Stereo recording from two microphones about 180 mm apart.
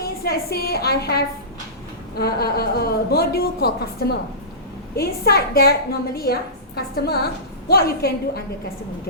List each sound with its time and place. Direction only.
0.0 s a woman's voice: 60° left (ahead or behind)